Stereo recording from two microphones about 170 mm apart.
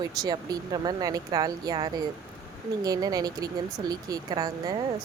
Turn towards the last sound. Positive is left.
turn(degrees=-25)  # may be behind; listen again after turning